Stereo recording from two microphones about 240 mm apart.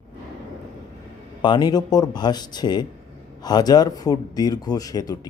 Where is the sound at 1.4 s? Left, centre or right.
Centre.